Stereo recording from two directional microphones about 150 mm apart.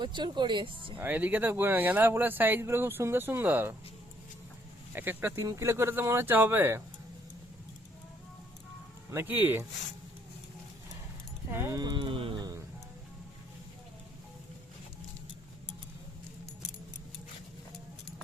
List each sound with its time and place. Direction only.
0.0 s speech: 30° right (ahead or behind)
0.9 s speech: 10° right (ahead or behind)
4.9 s speech: 15° right (ahead or behind)
9.0 s speech: 15° right (ahead or behind)
11.5 s speech: 20° right (ahead or behind); by 12.5 s 35° right (ahead or behind)